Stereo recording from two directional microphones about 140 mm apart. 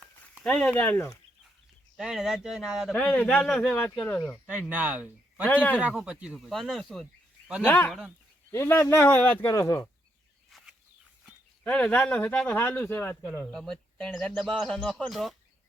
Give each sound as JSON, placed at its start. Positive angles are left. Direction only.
{"t": 0.4, "sound": "speech", "side_deg": 5}
{"t": 2.0, "sound": "speech", "side_deg": -5}
{"t": 2.9, "sound": "speech", "side_deg": 10}
{"t": 4.4, "sound": "speech", "side_deg": -10}
{"t": 7.6, "sound": "speech", "side_deg": 15}
{"t": 7.9, "sound": "speech", "side_deg": 0}
{"t": 8.4, "sound": "speech", "side_deg": 15}
{"t": 9.5, "sound": "speech", "side_deg": 25}
{"t": 10.5, "sound": "a sound", "side_deg": 0}
{"t": 11.6, "sound": "speech", "side_deg": 10}